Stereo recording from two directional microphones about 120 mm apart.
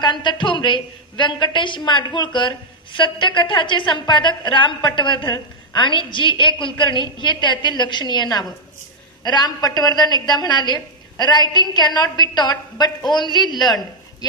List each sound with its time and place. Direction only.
0.0 s a woman's voice: 40° left (ahead or behind)